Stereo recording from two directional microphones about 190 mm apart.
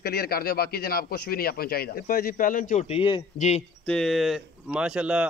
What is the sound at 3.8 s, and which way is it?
Speech, 5° left (ahead or behind).